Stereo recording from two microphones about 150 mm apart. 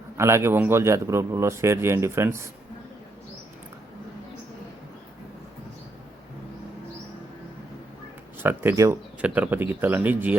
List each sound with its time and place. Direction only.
0.2 s a man's voice: 15° right (ahead or behind)
8.4 s a man's voice: 15° right (ahead or behind)